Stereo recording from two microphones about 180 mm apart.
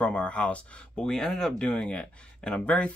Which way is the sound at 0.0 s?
5° left (ahead or behind).